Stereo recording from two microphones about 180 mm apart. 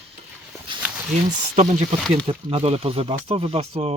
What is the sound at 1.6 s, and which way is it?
Speech, 40° right (ahead or behind).